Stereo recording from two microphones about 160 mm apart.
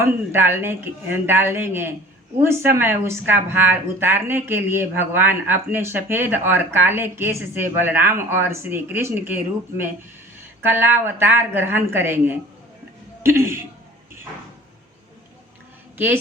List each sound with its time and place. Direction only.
0.0 s speech: 15° right (ahead or behind)